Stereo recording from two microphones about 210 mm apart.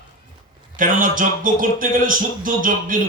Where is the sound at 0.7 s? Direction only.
40° right (ahead or behind).